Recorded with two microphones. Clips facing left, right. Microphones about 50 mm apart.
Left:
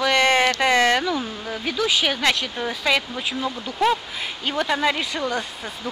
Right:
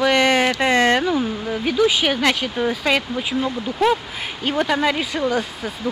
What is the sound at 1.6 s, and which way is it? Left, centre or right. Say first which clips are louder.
Speech: right 4 dB; right.